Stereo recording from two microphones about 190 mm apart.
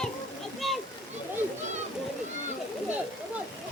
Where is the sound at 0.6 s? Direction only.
Centre (ahead or behind).